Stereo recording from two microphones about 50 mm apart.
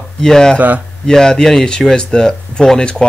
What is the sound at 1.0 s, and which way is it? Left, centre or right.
Speech, centre.